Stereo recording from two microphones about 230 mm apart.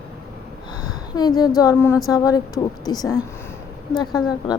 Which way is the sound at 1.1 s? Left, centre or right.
Centre.